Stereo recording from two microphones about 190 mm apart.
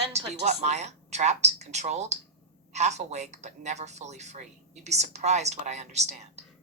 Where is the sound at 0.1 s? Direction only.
35° right (ahead or behind).